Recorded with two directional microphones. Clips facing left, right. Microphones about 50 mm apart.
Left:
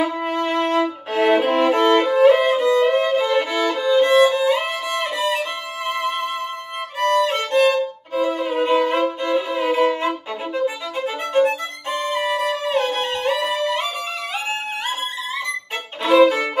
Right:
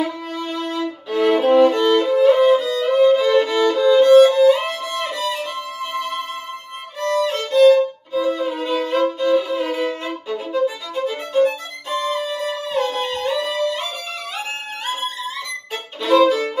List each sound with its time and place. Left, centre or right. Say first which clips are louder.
0.4 s violin: left 5 dB; left
1.8 s violin: left 1 dB; left
7.0 s violin: left 2 dB; left
11.3 s music: even; left
16.0 s violin: left 1 dB; left